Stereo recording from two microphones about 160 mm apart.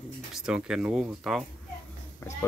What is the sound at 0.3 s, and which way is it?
Speech, 5° right (ahead or behind).